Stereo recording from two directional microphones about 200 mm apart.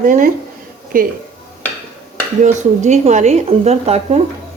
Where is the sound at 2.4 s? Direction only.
35° right (ahead or behind).